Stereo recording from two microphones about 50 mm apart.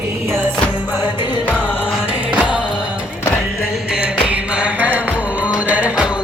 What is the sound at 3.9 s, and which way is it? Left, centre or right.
Music, right.